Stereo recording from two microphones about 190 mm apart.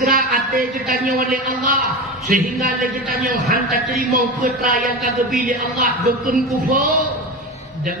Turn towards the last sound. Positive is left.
turn(degrees=-45)  # may be behind; listen again after turning